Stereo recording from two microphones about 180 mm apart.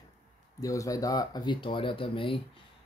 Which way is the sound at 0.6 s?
20° left (ahead or behind).